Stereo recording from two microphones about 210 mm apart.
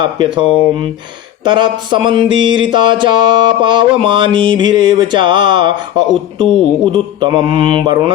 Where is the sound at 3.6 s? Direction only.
20° right (ahead or behind).